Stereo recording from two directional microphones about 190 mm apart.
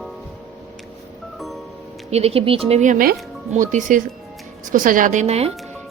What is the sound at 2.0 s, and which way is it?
A woman's voice, 35° right (ahead or behind).